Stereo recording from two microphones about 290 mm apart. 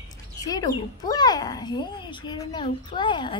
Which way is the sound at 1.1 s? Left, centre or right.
Centre.